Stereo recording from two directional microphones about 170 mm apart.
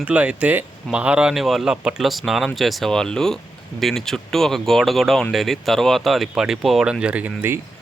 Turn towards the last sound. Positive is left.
turn(degrees=-10)  # may be behind; listen again after turning